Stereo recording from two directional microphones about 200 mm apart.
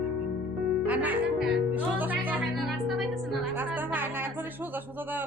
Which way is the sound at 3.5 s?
10° right (ahead or behind).